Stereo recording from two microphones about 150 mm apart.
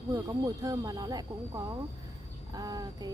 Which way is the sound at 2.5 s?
25° right (ahead or behind).